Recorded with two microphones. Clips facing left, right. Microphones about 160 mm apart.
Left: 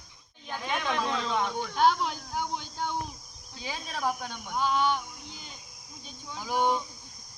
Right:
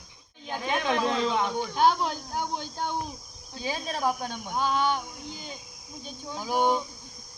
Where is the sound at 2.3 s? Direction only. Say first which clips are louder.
Even; 45° right (ahead or behind).